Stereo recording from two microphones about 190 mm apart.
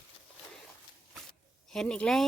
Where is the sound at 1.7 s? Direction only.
5° left (ahead or behind).